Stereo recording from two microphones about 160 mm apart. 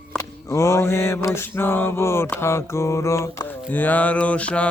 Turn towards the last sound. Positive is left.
turn(degrees=5)  # may be behind; listen again after turning